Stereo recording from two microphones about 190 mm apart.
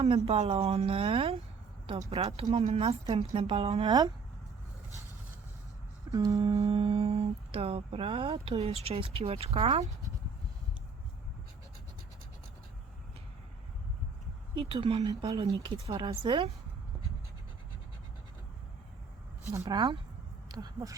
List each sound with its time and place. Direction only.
0.0 s humming: 30° right (ahead or behind)
6.1 s a sound: 20° right (ahead or behind)
6.5 s humming: 30° right (ahead or behind)
14.5 s speech: 30° right (ahead or behind)
19.5 s speech: 15° right (ahead or behind)